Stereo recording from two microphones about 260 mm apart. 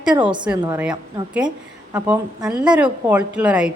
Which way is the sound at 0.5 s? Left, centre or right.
Centre.